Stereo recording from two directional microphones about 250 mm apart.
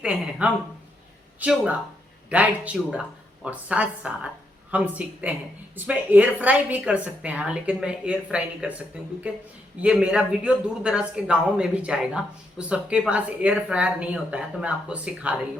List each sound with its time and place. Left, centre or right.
0.0 s speech: centre